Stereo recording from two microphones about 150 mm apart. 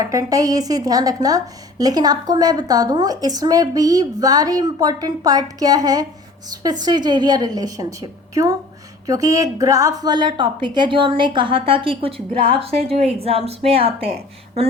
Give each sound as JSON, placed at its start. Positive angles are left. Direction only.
{"t": 0.0, "sound": "a woman's voice", "side_deg": -25}
{"t": 9.0, "sound": "a woman's voice", "side_deg": -20}